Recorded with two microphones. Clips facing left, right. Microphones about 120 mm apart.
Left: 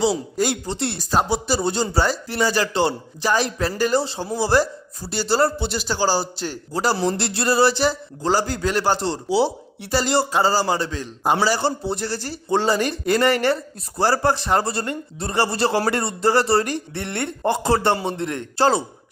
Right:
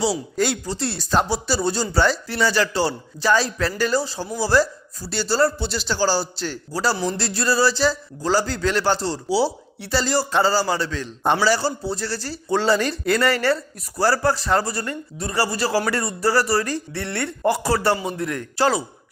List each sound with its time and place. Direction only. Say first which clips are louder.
0.0 s a man's voice: left 1 dB; 20° left (ahead or behind)